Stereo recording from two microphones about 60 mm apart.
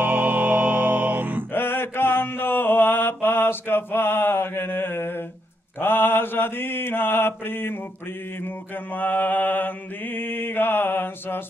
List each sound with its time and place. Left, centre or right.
0.0 s music: right
1.5 s mantra: left
8.9 s mantra: left